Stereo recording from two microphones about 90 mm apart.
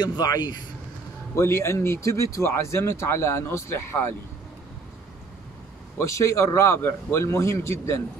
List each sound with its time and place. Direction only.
0.0 s speech: 45° left (ahead or behind)
1.3 s speech: 30° left (ahead or behind)
5.9 s a man's voice: 35° left (ahead or behind)